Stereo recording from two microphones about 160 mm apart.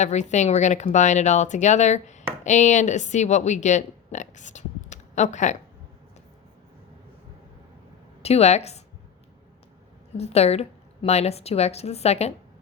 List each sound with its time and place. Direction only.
0.0 s a woman's voice: 45° left (ahead or behind)
8.2 s a woman's voice: 40° left (ahead or behind)
10.2 s a woman's voice: 40° left (ahead or behind)